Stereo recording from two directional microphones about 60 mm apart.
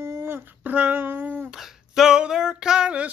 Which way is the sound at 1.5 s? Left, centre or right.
Centre.